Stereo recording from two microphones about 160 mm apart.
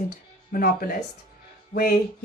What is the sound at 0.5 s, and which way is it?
Speech, 65° left (ahead or behind).